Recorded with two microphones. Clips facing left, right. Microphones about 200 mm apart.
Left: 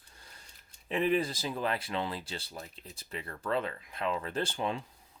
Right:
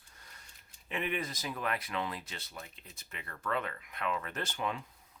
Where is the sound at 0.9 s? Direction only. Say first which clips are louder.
Left 7 dB; 35° left (ahead or behind).